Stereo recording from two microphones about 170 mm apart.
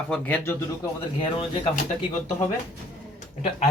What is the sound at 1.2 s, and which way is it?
Speech, 35° left (ahead or behind).